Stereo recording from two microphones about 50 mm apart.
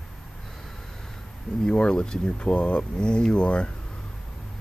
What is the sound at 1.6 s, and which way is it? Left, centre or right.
Speech, centre.